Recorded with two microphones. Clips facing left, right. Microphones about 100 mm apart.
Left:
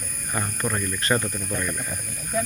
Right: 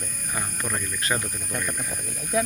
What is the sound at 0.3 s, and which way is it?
Speech, centre (ahead or behind).